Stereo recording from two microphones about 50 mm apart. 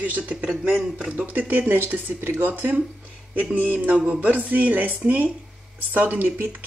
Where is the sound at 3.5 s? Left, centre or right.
Right.